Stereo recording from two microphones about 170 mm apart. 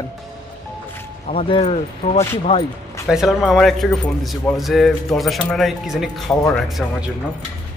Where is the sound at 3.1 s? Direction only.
Centre (ahead or behind).